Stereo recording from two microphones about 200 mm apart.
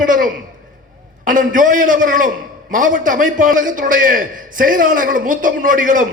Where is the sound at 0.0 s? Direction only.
40° right (ahead or behind).